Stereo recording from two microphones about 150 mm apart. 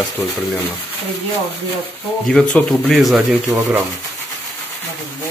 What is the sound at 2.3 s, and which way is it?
Speech, 5° left (ahead or behind).